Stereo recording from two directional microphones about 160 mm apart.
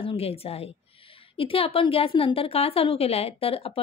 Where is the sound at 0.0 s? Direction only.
35° left (ahead or behind).